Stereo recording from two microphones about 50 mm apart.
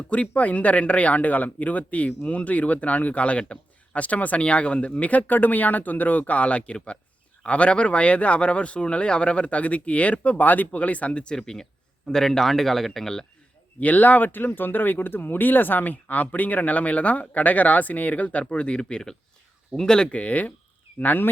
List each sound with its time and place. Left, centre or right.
0.1 s speech: left; by 13.2 s centre
13.7 s speech: left